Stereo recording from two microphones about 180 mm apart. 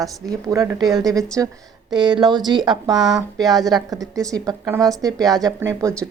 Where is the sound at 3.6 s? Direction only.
20° right (ahead or behind).